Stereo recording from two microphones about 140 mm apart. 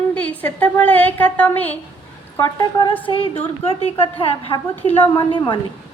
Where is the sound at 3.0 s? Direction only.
40° left (ahead or behind).